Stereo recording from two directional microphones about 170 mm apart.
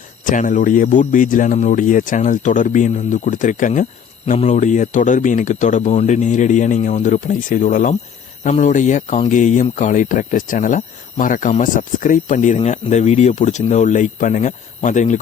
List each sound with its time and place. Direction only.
0.3 s speech: 50° left (ahead or behind)